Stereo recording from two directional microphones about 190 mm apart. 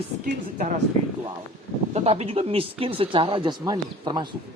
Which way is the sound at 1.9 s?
35° right (ahead or behind).